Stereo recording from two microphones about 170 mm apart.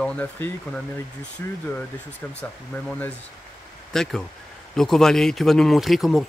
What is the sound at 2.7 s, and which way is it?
Speech, 10° left (ahead or behind).